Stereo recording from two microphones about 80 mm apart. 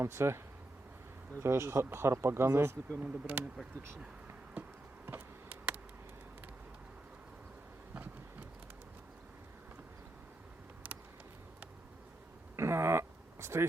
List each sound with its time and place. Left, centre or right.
0.0 s speech: right
1.4 s speech: right
3.0 s speech: right
5.0 s insect: right
12.5 s a sound: right